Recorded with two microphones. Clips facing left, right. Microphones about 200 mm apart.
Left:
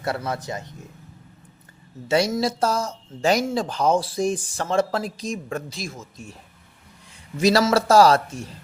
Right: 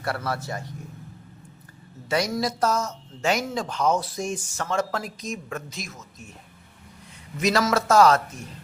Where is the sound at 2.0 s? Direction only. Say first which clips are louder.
Left 4 dB; 25° left (ahead or behind).